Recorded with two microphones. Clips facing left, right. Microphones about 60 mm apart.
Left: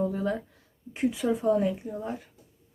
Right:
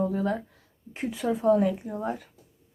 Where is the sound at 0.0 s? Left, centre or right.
Right.